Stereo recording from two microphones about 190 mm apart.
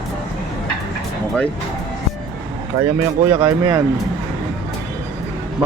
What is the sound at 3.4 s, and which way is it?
Speech, 15° right (ahead or behind).